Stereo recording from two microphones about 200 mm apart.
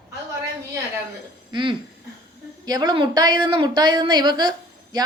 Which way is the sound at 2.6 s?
20° right (ahead or behind).